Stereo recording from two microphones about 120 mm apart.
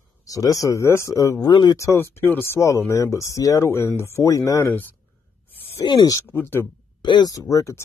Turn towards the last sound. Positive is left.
turn(degrees=25)  # may be behind; listen again after turning